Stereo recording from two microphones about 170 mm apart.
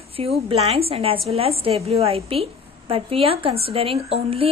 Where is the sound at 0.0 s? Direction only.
35° right (ahead or behind).